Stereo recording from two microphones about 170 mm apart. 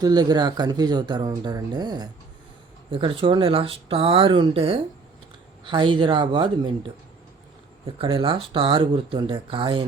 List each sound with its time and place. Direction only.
0.0 s speech: 25° right (ahead or behind)